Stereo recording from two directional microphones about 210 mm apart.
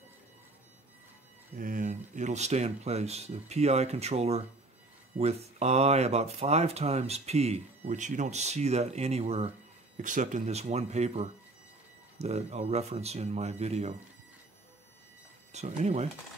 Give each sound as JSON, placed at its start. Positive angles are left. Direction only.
{"t": 1.6, "sound": "speech", "side_deg": -40}
{"t": 15.5, "sound": "speech", "side_deg": -30}